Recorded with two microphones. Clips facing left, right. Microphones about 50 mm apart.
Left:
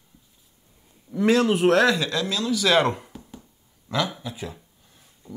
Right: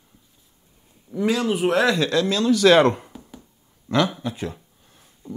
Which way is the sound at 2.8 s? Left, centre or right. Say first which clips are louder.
Right 5 dB; centre.